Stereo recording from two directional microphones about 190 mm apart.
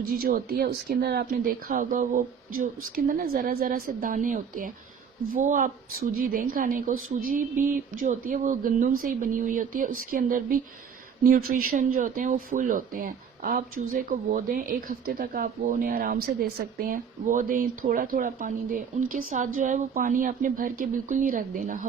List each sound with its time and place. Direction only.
0.1 s speech: 50° right (ahead or behind)